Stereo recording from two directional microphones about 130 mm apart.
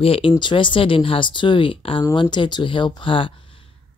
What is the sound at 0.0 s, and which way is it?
Speech, 45° left (ahead or behind).